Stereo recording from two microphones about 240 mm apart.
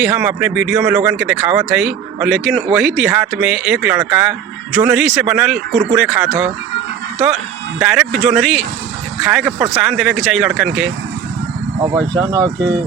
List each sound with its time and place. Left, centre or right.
0.0 s speech: centre
7.8 s speech: centre
11.8 s speech: centre